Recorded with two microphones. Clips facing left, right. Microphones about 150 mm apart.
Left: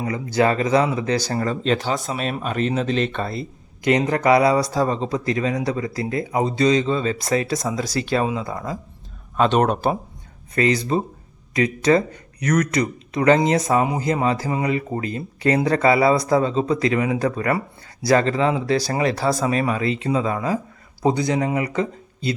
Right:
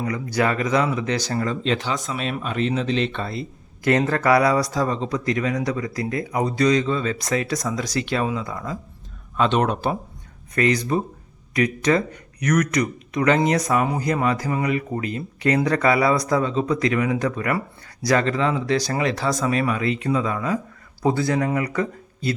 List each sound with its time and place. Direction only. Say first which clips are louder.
0.0 s speech: left 3 dB; 25° left (ahead or behind); by 3.4 s 45° left (ahead or behind)
3.8 s speech: left 1 dB; 20° left (ahead or behind)
9.4 s speech: left 2 dB; 45° left (ahead or behind)
10.5 s speech: left 1 dB; 30° left (ahead or behind)
21.0 s speech: left 1 dB; 20° left (ahead or behind)